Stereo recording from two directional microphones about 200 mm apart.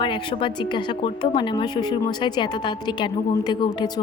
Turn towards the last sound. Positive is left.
turn(degrees=20)  # may be behind; listen again after turning